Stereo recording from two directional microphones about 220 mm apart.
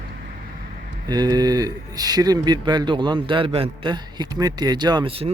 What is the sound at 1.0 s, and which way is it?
Speech, 20° right (ahead or behind).